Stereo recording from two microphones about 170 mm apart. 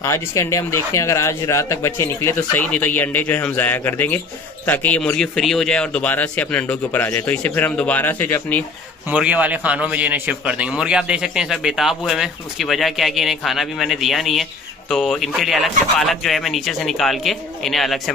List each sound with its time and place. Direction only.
0.0 s speech: 15° left (ahead or behind)
9.1 s a man's voice: 10° right (ahead or behind)